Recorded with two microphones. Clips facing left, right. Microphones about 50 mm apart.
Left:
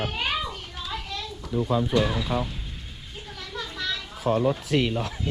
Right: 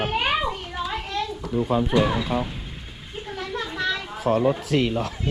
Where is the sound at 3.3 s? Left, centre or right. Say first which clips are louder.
Right 6 dB; right.